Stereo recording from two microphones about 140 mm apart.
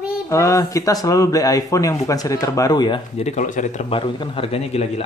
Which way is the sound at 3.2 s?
60° left (ahead or behind).